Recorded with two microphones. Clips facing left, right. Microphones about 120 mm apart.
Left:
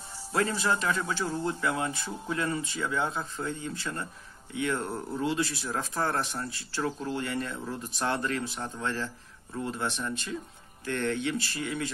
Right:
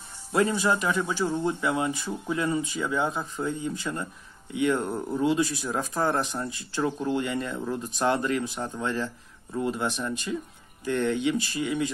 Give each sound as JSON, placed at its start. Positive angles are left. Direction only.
{"t": 0.3, "sound": "speech", "side_deg": -15}